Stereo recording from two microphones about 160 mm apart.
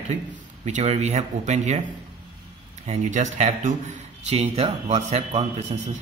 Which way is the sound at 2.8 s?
45° right (ahead or behind).